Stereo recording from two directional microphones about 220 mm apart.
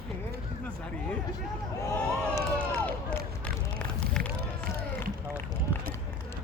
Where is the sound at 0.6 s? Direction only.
5° left (ahead or behind).